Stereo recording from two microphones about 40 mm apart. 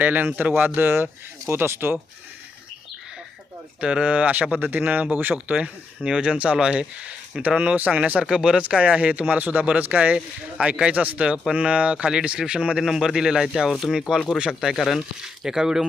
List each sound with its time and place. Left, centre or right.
0.0 s speech: right
0.3 s speech: right
0.8 s speech: right
1.5 s speech: right
3.8 s speech: right
4.1 s speech: right
4.6 s speech: right
6.0 s speech: centre
7.9 s speech: right
8.2 s speech: centre
8.5 s speech: right
12.8 s speech: centre
14.3 s speech: right
14.7 s speech: centre